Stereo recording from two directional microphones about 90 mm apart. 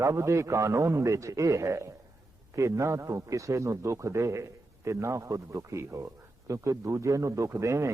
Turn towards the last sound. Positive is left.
turn(degrees=-35)  # may be behind; listen again after turning